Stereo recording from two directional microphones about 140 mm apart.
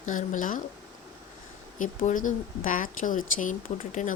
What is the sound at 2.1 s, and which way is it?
Speech, 70° left (ahead or behind).